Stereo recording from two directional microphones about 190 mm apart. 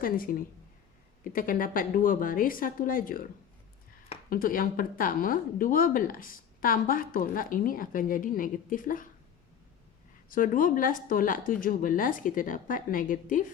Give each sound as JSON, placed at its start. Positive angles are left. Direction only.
{"t": 0.0, "sound": "speech", "side_deg": 50}
{"t": 4.3, "sound": "speech", "side_deg": 50}
{"t": 10.2, "sound": "speech", "side_deg": 45}